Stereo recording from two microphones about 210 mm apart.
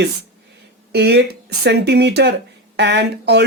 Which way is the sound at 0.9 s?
50° right (ahead or behind).